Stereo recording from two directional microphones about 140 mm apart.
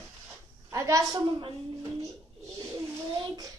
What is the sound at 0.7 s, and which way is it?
Speech, 20° right (ahead or behind).